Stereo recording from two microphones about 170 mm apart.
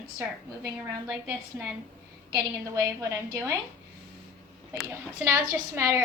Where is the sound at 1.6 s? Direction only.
10° right (ahead or behind).